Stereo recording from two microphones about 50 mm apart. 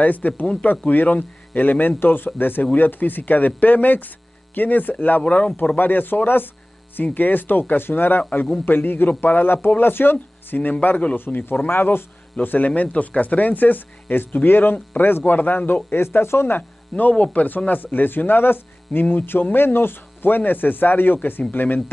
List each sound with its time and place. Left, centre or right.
0.0 s speech: left
5.8 s a man's voice: left
11.1 s a man's voice: left
12.4 s speech: left
17.1 s speech: left